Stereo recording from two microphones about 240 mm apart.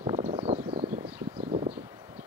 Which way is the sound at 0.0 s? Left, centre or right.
Right.